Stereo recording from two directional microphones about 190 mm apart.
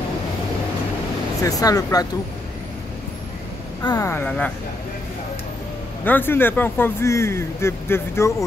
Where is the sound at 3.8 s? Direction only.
20° left (ahead or behind).